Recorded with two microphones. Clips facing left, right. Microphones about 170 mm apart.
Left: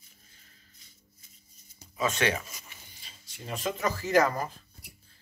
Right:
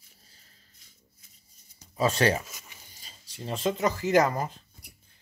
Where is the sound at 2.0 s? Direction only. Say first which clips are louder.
Right 4 dB; 35° right (ahead or behind).